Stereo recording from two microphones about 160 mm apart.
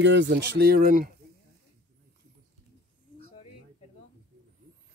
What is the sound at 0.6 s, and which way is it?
Speech, 70° right (ahead or behind).